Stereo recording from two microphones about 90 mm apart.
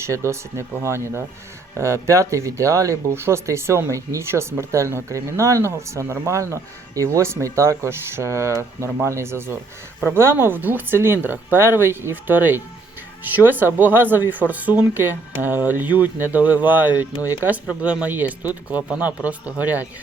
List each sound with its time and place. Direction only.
0.0 s speech: 30° right (ahead or behind)